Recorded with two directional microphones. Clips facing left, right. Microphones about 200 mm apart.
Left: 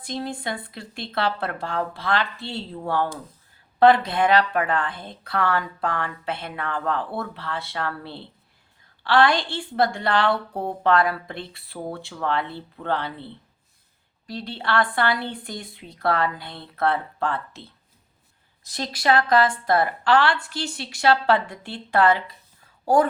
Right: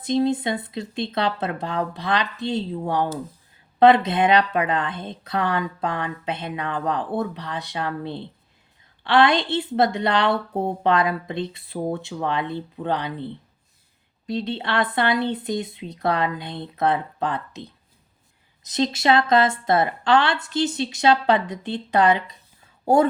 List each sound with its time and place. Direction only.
0.0 s speech: 20° right (ahead or behind)